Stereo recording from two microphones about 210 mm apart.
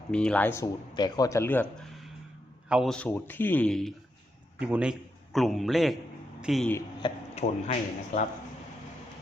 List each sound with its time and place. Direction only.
0.1 s speech: 5° left (ahead or behind)
2.6 s a man's voice: centre (ahead or behind)
7.3 s a man's voice: 35° left (ahead or behind)